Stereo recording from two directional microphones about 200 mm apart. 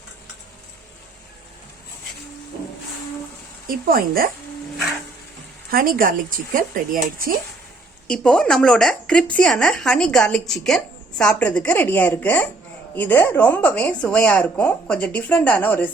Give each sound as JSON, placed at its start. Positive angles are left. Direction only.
{"t": 3.7, "sound": "speech", "side_deg": -45}
{"t": 5.7, "sound": "speech", "side_deg": -45}
{"t": 8.0, "sound": "speech", "side_deg": 5}